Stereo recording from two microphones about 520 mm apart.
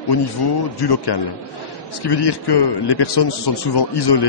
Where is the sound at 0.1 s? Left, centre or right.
Left.